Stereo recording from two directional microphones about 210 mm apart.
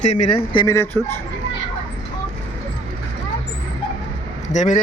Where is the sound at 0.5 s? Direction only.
15° left (ahead or behind).